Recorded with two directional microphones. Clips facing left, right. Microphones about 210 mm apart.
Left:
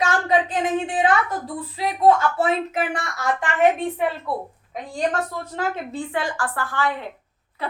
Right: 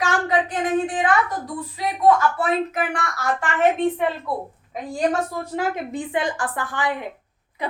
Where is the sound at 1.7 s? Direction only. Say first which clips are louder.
Left 1 dB; 25° left (ahead or behind).